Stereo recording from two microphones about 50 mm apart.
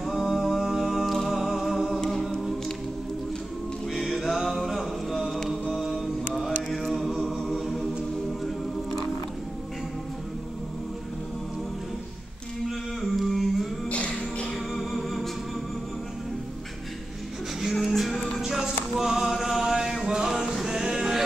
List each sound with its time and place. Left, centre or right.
0.0 s music: centre
2.0 s a capella: centre
3.9 s music: centre
5.3 s music: centre
5.9 s mantra: centre
6.7 s a capella: centre
12.6 s a sound: centre
13.8 s music: left
14.7 s music: centre
17.7 s music: centre
18.4 s music: centre